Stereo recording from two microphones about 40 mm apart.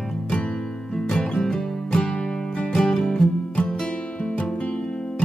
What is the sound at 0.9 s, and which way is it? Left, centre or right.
Music, centre.